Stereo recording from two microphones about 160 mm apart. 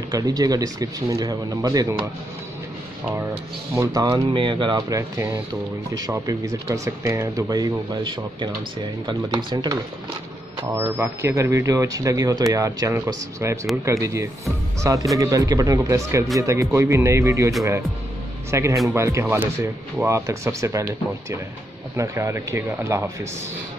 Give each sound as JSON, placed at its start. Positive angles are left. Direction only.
{"t": 0.1, "sound": "speech", "side_deg": -25}
{"t": 3.7, "sound": "speech", "side_deg": -20}
{"t": 10.6, "sound": "speech", "side_deg": -15}
{"t": 18.5, "sound": "speech", "side_deg": -15}
{"t": 21.9, "sound": "speech", "side_deg": -20}